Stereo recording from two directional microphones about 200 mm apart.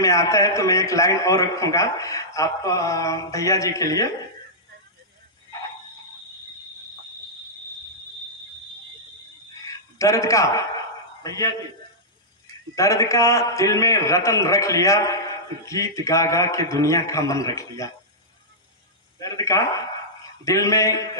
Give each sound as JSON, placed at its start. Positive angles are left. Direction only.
{"t": 0.0, "sound": "a man's voice", "side_deg": 15}
{"t": 9.7, "sound": "a sound", "side_deg": 15}
{"t": 11.2, "sound": "a man's voice", "side_deg": 15}
{"t": 12.7, "sound": "a man's voice", "side_deg": 15}
{"t": 19.1, "sound": "a man's voice", "side_deg": 15}